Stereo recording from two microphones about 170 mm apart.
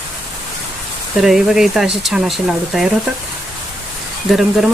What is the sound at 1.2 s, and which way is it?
A woman's voice, centre (ahead or behind).